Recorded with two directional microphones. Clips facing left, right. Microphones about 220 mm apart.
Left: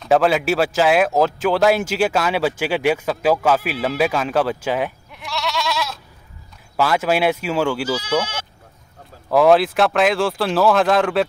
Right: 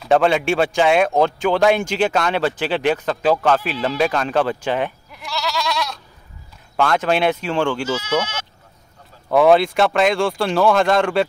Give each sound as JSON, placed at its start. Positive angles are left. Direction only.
{"t": 0.0, "sound": "speech", "side_deg": 0}
{"t": 8.0, "sound": "speech", "side_deg": 30}
{"t": 9.3, "sound": "speech", "side_deg": 0}